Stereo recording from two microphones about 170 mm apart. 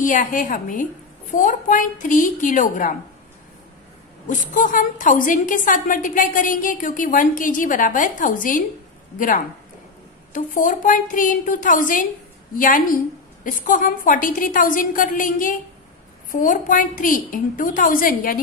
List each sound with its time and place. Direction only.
0.0 s a woman's voice: 50° left (ahead or behind)
4.3 s a woman's voice: 50° left (ahead or behind)
10.3 s a woman's voice: 50° left (ahead or behind)